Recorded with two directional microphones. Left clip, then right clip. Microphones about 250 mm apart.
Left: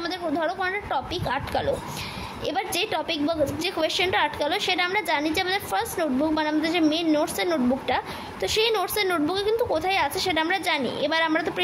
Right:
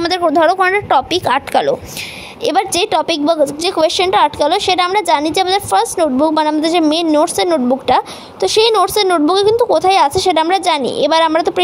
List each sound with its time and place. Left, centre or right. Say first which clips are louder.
0.0 s a woman's voice: right 15 dB; right